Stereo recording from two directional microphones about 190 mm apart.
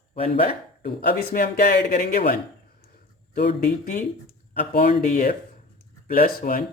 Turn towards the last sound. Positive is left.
turn(degrees=50)  # may be behind; listen again after turning